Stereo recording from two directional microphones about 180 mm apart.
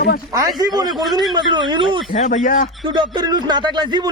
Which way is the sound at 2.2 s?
45° left (ahead or behind).